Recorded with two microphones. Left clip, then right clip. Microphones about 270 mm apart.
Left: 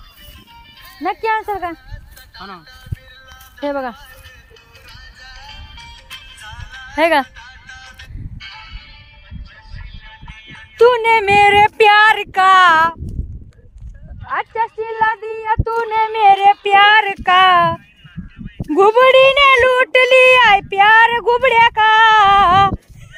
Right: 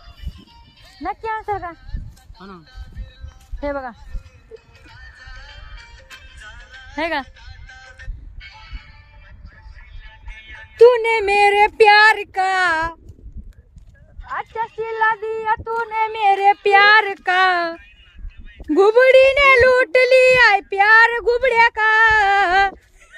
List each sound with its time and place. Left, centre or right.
0.8 s music: centre
1.0 s speech: left
2.3 s speech: centre
3.6 s speech: left
4.5 s music: centre
8.6 s music: left
10.8 s speech: centre
14.5 s a sound: left
16.1 s speech: centre
18.9 s speech: centre